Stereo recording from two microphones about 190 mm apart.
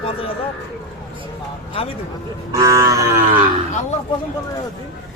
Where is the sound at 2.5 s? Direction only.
15° right (ahead or behind).